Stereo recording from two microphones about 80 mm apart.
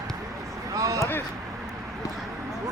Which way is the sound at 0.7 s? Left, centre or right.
Right.